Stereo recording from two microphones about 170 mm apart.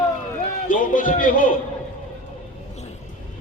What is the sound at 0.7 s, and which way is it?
Speech, 50° left (ahead or behind).